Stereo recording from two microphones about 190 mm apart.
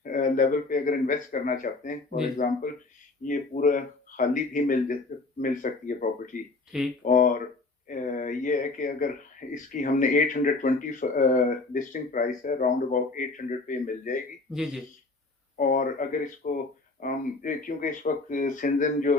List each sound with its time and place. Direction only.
0.0 s speech: 45° left (ahead or behind)
14.5 s speech: centre (ahead or behind)
15.5 s speech: 45° left (ahead or behind)